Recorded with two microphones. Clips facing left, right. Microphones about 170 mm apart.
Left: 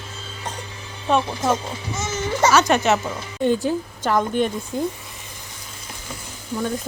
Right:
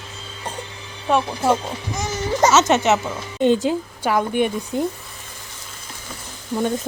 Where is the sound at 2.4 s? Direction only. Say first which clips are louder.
Right 1 dB; 20° right (ahead or behind).